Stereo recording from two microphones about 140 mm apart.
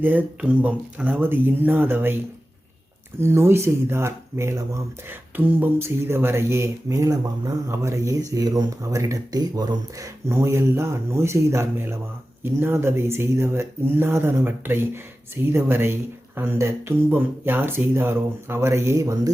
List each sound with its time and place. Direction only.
0.0 s speech: 15° right (ahead or behind)